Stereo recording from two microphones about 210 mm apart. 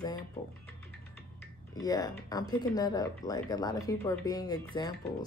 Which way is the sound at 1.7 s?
15° left (ahead or behind).